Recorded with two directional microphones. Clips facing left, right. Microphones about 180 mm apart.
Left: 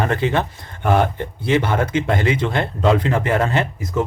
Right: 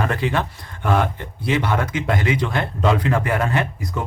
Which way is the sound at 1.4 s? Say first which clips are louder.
Left 3 dB; 25° left (ahead or behind).